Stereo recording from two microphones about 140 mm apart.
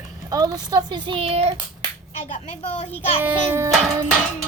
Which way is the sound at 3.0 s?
15° right (ahead or behind).